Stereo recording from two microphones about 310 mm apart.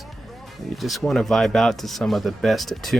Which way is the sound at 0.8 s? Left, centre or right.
Centre.